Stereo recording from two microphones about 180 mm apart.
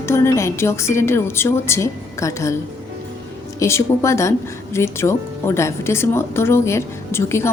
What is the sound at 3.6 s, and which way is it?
Speech, 15° left (ahead or behind).